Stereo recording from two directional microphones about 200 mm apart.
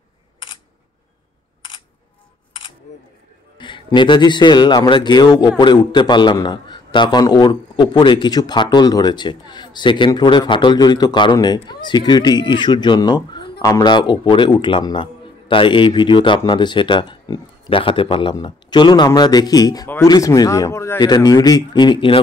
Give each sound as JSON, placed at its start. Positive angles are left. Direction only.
{"t": 3.5, "sound": "a man's voice", "side_deg": 25}